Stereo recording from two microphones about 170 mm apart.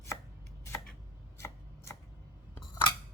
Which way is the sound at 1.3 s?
15° left (ahead or behind).